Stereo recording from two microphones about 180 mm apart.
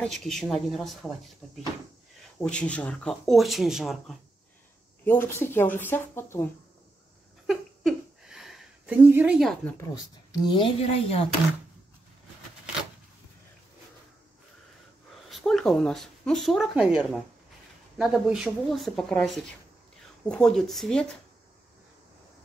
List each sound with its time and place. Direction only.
0.0 s speech: 5° left (ahead or behind)
2.4 s speech: 5° left (ahead or behind)
5.0 s speech: 10° left (ahead or behind)
7.4 s a sound: 5° right (ahead or behind)
10.3 s speech: 25° left (ahead or behind)
15.2 s speech: centre (ahead or behind)